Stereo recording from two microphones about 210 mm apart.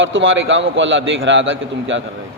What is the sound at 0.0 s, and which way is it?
A man's voice, 65° right (ahead or behind).